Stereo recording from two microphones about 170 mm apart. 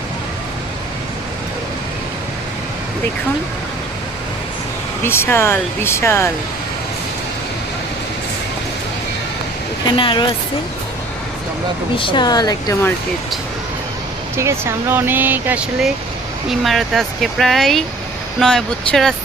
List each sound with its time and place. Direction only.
5.0 s speech: 15° left (ahead or behind)
10.0 s speech: 30° left (ahead or behind)
11.9 s speech: 30° left (ahead or behind)
14.3 s speech: 15° right (ahead or behind); by 19.1 s 5° left (ahead or behind)